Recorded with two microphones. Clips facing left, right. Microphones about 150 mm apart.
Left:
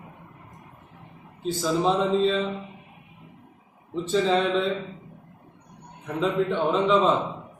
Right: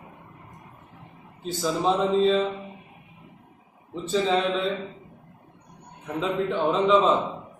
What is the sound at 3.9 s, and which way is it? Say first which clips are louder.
Speech: left 1 dB; centre (ahead or behind).